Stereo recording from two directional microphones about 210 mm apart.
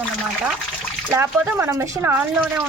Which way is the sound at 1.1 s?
10° right (ahead or behind).